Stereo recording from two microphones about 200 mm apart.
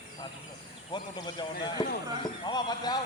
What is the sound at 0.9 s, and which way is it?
A man's voice, 20° left (ahead or behind).